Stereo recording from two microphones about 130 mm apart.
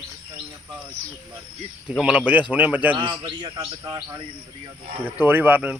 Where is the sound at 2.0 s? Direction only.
10° right (ahead or behind).